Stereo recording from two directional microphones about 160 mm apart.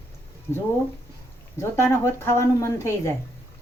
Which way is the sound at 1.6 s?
20° left (ahead or behind).